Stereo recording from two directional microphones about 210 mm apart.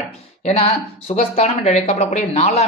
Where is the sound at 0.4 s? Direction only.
30° left (ahead or behind).